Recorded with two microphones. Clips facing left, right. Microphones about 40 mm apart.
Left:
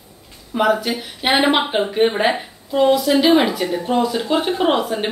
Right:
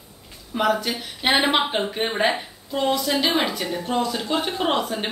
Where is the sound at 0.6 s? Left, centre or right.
Centre.